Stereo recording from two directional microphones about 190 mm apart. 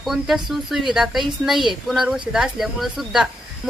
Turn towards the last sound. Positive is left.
turn(degrees=0)  # may be behind; listen again after turning